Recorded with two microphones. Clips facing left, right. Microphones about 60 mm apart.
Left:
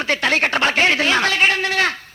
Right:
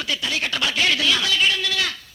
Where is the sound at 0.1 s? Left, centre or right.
Left.